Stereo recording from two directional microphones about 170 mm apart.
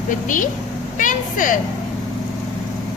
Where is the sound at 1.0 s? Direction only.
50° left (ahead or behind).